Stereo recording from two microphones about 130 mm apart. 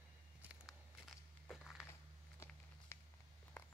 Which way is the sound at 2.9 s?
20° left (ahead or behind).